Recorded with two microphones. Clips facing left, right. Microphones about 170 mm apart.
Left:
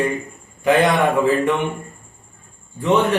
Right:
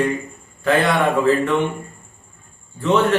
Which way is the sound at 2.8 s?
15° left (ahead or behind).